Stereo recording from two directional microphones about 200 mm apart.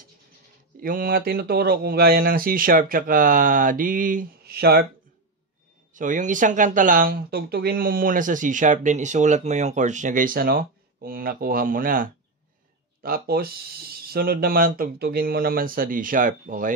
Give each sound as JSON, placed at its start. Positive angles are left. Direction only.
{"t": 0.7, "sound": "speech", "side_deg": -45}
{"t": 5.9, "sound": "speech", "side_deg": -40}